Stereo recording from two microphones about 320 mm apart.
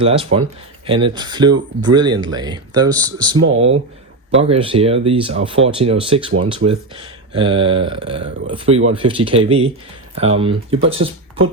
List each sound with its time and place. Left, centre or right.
0.0 s speech: centre
3.4 s speech: right
4.4 s speech: centre